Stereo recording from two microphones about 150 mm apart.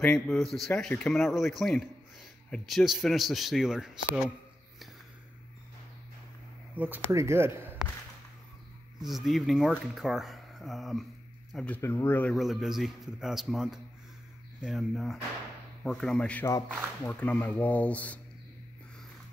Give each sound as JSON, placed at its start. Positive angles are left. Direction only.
{"t": 0.0, "sound": "speech", "side_deg": 5}
{"t": 6.8, "sound": "speech", "side_deg": -15}
{"t": 9.0, "sound": "speech", "side_deg": 0}
{"t": 12.4, "sound": "speech", "side_deg": 0}